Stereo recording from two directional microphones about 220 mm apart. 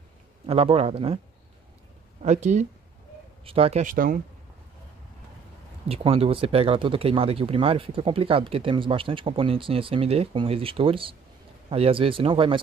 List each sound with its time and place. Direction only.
0.5 s speech: 25° right (ahead or behind)
2.2 s speech: 30° right (ahead or behind)
5.9 s speech: 25° right (ahead or behind)